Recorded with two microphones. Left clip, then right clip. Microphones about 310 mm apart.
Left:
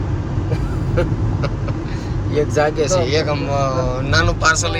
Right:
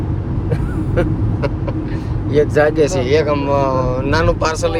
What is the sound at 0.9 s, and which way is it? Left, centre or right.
Vehicle, right.